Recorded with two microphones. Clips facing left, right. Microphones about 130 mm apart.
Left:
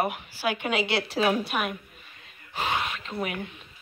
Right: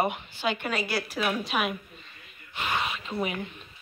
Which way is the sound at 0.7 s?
25° left (ahead or behind).